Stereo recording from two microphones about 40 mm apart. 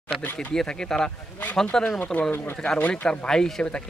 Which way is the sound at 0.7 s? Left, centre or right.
Centre.